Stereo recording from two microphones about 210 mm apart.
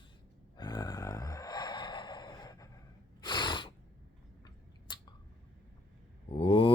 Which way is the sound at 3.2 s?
20° left (ahead or behind).